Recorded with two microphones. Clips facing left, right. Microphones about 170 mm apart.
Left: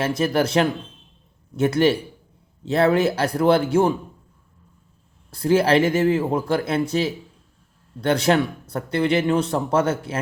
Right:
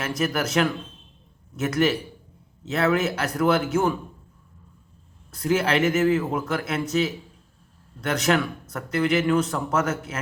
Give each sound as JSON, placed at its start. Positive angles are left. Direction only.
{"t": 0.0, "sound": "speech", "side_deg": 30}
{"t": 5.3, "sound": "speech", "side_deg": 30}